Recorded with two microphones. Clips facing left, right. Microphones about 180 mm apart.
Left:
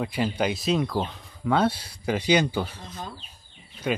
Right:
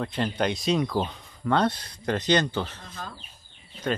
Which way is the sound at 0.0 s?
10° left (ahead or behind).